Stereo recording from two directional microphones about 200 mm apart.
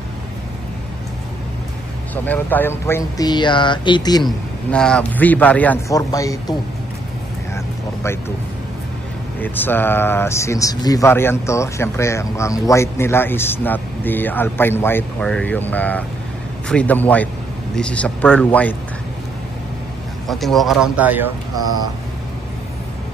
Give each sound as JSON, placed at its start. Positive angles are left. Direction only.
{"t": 2.2, "sound": "speech", "side_deg": 10}
{"t": 4.2, "sound": "speech", "side_deg": 0}
{"t": 7.5, "sound": "vehicle", "side_deg": 15}
{"t": 9.4, "sound": "speech", "side_deg": 10}
{"t": 20.2, "sound": "speech", "side_deg": 0}